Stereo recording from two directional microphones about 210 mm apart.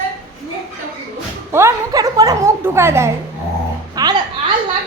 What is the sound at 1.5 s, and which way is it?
A child's voice, 15° right (ahead or behind).